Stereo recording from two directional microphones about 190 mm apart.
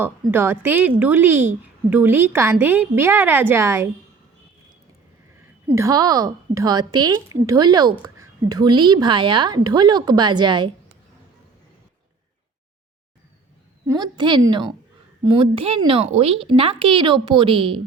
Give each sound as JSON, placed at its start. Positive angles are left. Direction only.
{"t": 0.0, "sound": "a woman's voice", "side_deg": -10}
{"t": 5.7, "sound": "a woman's voice", "side_deg": -20}
{"t": 13.8, "sound": "a woman's voice", "side_deg": -20}